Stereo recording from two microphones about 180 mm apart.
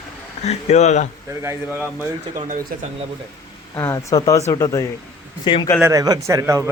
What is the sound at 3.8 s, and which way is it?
Speech, 15° left (ahead or behind).